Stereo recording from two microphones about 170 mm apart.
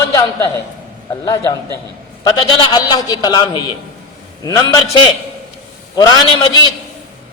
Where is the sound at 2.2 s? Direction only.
25° left (ahead or behind).